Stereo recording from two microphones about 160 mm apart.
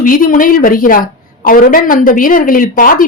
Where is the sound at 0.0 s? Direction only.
60° left (ahead or behind).